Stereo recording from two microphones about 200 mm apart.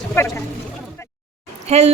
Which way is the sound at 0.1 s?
10° left (ahead or behind).